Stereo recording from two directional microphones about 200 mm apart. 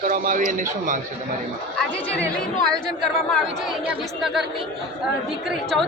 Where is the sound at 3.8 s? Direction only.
5° right (ahead or behind).